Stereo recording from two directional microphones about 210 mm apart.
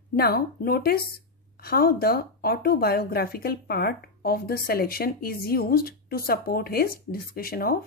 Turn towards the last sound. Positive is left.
turn(degrees=45)  # may be behind; listen again after turning